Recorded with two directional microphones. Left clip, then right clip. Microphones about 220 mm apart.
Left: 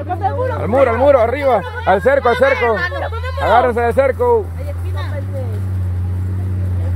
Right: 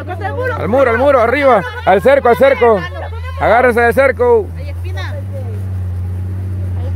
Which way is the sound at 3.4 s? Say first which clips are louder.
Right 3 dB; 35° right (ahead or behind).